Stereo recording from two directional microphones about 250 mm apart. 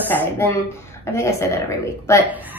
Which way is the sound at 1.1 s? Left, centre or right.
Centre.